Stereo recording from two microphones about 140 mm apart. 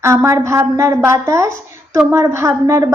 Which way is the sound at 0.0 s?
20° right (ahead or behind).